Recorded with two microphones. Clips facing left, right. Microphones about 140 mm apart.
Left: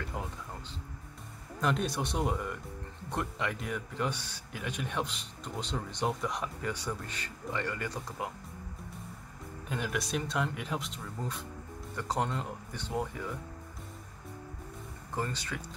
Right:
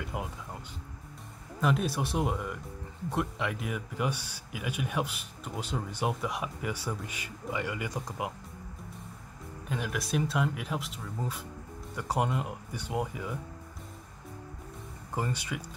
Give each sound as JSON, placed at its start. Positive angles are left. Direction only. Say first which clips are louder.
{"t": 0.0, "sound": "speech", "louder": "right 2 dB", "side_deg": -10}
{"t": 1.6, "sound": "speech", "louder": "right 2 dB", "side_deg": -5}
{"t": 9.7, "sound": "speech", "louder": "right 1 dB", "side_deg": 0}
{"t": 15.1, "sound": "speech", "louder": "right 2 dB", "side_deg": -15}